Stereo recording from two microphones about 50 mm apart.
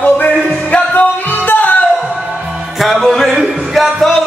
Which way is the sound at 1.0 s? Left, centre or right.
Left.